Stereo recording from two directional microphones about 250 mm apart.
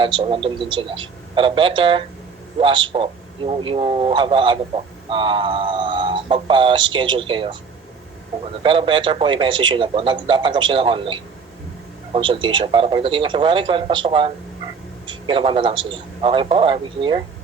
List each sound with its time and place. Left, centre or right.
0.0 s a man's voice: right
8.6 s a man's voice: right